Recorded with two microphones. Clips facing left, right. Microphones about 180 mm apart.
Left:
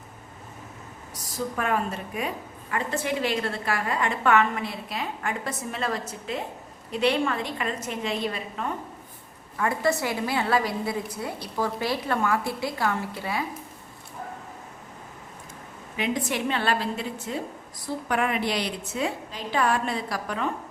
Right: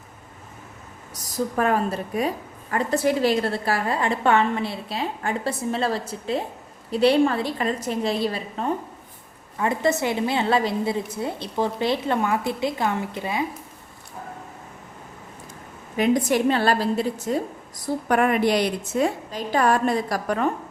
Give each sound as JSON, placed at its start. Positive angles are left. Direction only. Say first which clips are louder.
{"t": 1.1, "sound": "a woman's voice", "louder": "right 5 dB", "side_deg": -40}
{"t": 9.6, "sound": "a woman's voice", "louder": "right 3 dB", "side_deg": -20}
{"t": 16.0, "sound": "a woman's voice", "louder": "right 8 dB", "side_deg": -40}